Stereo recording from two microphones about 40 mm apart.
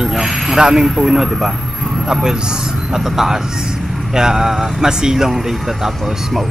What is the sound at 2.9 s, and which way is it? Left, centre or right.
Speech, centre.